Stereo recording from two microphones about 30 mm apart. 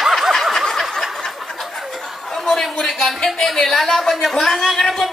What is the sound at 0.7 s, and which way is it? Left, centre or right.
Snicker, centre.